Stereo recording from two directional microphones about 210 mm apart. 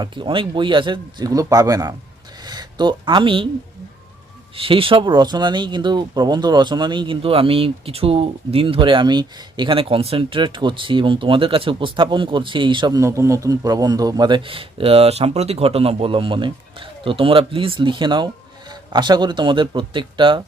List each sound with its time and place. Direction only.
0.0 s speech: 25° right (ahead or behind)
4.5 s speech: 25° right (ahead or behind)